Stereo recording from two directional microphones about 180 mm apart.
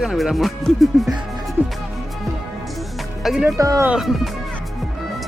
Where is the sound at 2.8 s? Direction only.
Centre (ahead or behind).